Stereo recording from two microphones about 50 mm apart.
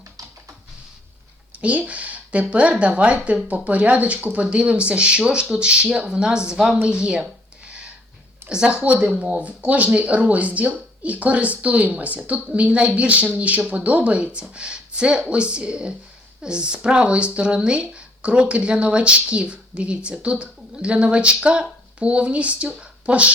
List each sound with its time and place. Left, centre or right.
1.5 s speech: right
6.8 s a sound: centre
8.4 s speech: centre